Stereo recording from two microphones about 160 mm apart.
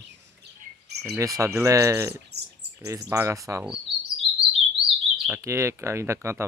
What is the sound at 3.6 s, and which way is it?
Chirp, 5° right (ahead or behind).